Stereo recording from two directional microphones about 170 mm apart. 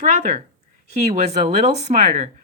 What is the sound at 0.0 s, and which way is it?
A woman's voice, 45° right (ahead or behind).